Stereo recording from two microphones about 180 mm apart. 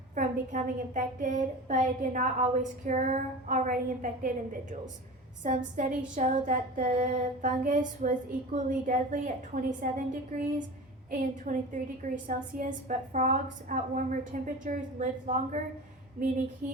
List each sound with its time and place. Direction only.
0.1 s a woman's voice: 45° right (ahead or behind)
5.4 s a woman's voice: 45° right (ahead or behind)